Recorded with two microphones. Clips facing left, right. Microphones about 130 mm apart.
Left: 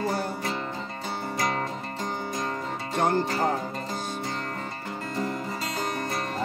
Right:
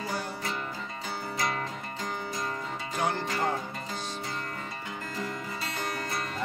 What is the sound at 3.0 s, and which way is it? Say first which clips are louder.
Music: left 6 dB; 40° left (ahead or behind).